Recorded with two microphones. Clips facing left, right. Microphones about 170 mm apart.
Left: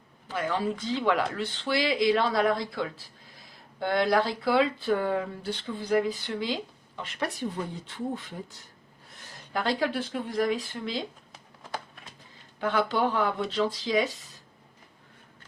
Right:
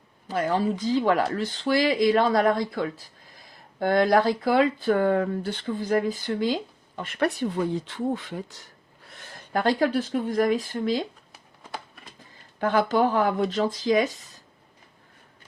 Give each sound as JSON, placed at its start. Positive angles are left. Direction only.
{"t": 0.3, "sound": "speech", "side_deg": -40}
{"t": 9.5, "sound": "speech", "side_deg": -50}
{"t": 12.5, "sound": "speech", "side_deg": -50}